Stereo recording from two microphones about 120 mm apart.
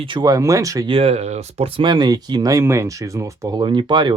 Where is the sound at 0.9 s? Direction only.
55° right (ahead or behind).